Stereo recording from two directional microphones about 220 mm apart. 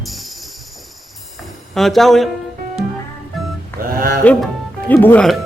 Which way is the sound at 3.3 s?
Centre (ahead or behind).